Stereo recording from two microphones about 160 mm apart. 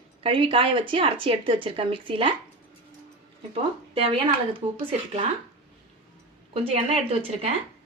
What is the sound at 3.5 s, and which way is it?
Speech, 35° right (ahead or behind).